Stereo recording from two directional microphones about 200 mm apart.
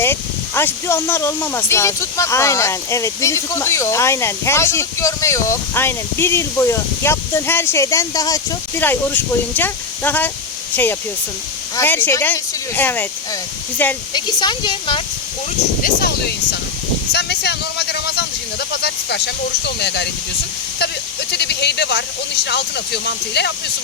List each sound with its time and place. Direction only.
0.0 s speech: 10° left (ahead or behind)
11.8 s speech: 10° left (ahead or behind)
14.1 s speech: 20° left (ahead or behind)
15.8 s speech: 50° left (ahead or behind)
17.1 s a sound: 55° left (ahead or behind)
18.8 s speech: 55° left (ahead or behind)
21.3 s speech: 55° left (ahead or behind)